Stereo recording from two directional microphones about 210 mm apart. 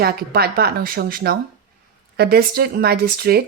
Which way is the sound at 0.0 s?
50° right (ahead or behind).